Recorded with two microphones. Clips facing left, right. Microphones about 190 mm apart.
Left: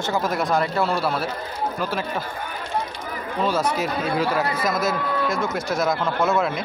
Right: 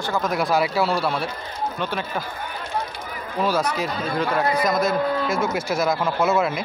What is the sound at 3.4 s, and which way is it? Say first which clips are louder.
Speech: right 1 dB; 5° right (ahead or behind).